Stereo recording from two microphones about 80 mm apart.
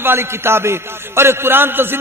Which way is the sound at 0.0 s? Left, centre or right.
Right.